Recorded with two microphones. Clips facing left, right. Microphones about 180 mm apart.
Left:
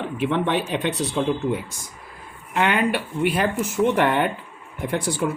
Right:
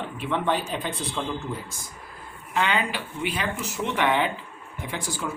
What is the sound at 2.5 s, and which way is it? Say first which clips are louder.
Speech: left 5 dB; 60° left (ahead or behind).